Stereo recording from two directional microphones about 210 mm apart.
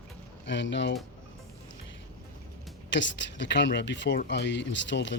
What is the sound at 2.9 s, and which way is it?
Speech, 60° left (ahead or behind).